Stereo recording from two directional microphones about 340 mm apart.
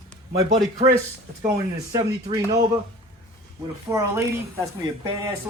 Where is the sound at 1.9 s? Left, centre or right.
Centre.